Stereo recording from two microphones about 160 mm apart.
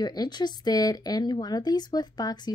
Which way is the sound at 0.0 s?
25° left (ahead or behind).